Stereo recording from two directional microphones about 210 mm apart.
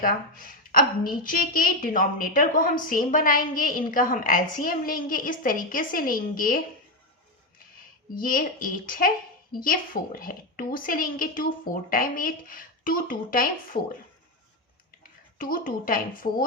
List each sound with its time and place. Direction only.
0.0 s a woman's voice: 45° left (ahead or behind)
8.1 s a woman's voice: 40° left (ahead or behind)
15.4 s a woman's voice: 40° left (ahead or behind)